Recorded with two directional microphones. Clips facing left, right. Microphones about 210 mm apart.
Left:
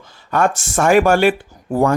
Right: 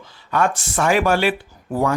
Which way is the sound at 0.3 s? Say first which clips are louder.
Left 3 dB; 45° left (ahead or behind).